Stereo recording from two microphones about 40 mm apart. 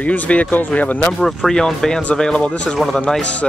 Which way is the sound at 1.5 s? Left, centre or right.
Centre.